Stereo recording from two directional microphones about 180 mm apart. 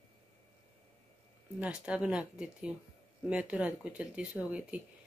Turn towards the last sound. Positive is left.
turn(degrees=-5)  # may be behind; listen again after turning